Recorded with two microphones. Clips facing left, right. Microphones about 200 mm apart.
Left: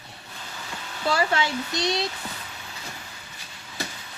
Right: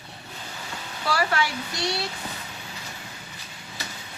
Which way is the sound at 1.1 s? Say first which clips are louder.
Left 1 dB; 25° left (ahead or behind).